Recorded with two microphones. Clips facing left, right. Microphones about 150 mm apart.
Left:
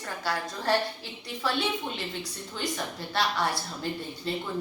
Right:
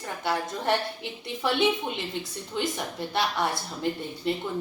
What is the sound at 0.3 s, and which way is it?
Speech, 20° right (ahead or behind).